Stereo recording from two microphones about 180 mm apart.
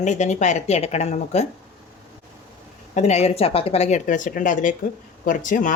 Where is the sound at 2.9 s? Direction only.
35° left (ahead or behind).